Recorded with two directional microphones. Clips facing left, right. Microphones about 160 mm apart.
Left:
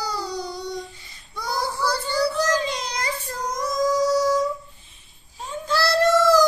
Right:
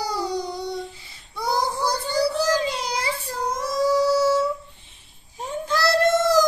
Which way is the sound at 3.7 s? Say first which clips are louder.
Right 1 dB; 5° right (ahead or behind).